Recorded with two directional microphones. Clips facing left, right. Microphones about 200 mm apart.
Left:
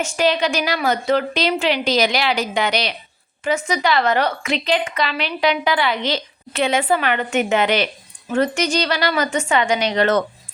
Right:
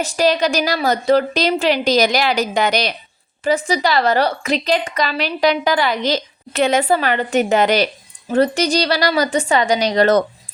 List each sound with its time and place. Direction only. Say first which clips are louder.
0.0 s a woman's voice: right 2 dB; 35° right (ahead or behind)